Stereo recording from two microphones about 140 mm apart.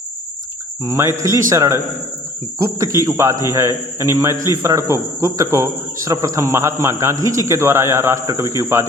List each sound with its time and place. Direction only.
0.9 s a man's voice: 20° right (ahead or behind)